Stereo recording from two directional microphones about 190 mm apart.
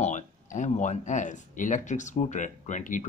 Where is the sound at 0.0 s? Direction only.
40° left (ahead or behind).